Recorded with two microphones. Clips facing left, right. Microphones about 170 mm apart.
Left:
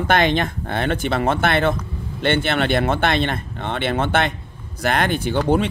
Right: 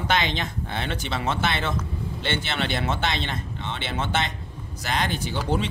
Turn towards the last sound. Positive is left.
turn(degrees=60)  # may be behind; listen again after turning